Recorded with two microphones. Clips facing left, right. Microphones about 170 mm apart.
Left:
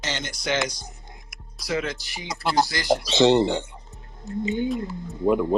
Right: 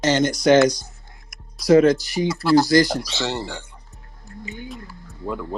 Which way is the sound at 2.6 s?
40° right (ahead or behind).